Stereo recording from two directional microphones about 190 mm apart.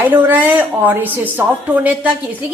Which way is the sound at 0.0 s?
10° right (ahead or behind).